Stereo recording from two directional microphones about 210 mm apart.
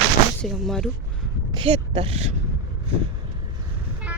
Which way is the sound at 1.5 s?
25° right (ahead or behind).